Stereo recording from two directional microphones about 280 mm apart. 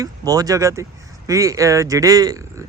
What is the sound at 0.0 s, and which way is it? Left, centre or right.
Speech, centre.